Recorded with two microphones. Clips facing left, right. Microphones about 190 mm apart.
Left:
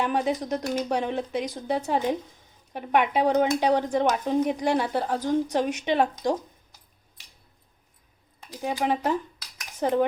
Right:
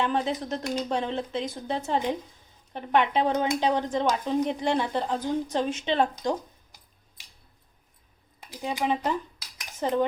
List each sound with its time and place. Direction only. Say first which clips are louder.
0.0 s a woman's voice: left 2 dB; 10° left (ahead or behind)
8.8 s a woman's voice: left 1 dB; 10° left (ahead or behind)